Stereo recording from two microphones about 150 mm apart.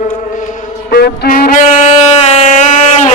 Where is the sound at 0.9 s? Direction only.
90° left; by 1.6 s 70° left (ahead or behind).